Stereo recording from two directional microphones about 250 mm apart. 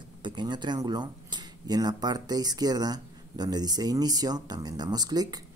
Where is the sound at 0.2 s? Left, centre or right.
Centre.